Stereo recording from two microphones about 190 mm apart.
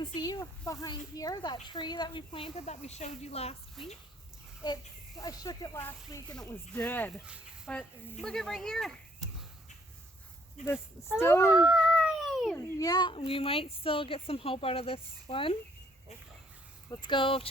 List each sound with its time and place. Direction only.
0.0 s a child's voice: 20° left (ahead or behind)
5.2 s speech: 20° left (ahead or behind)
7.3 s a sound: 5° right (ahead or behind)
7.7 s speech: 5° left (ahead or behind)
11.2 s speech: 15° left (ahead or behind)
11.5 s a sound: centre (ahead or behind)
12.5 s a child's voice: 20° left (ahead or behind)
16.9 s a child's voice: 25° left (ahead or behind)